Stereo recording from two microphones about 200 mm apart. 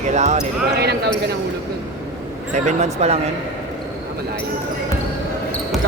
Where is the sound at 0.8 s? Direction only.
55° right (ahead or behind).